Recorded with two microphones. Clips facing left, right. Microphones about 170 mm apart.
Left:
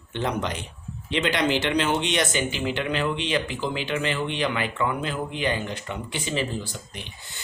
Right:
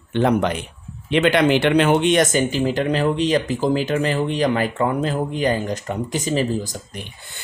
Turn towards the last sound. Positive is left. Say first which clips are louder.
# right 7 dB
turn(degrees=-40)  # may be behind; listen again after turning